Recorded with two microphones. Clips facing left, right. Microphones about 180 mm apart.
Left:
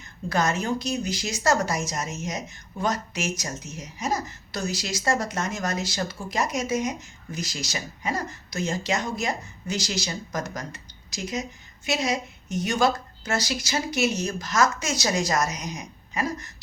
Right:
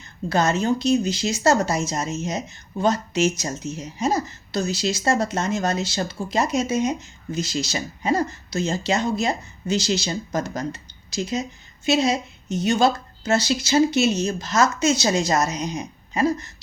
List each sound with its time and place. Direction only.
0.3 s speech: 25° right (ahead or behind)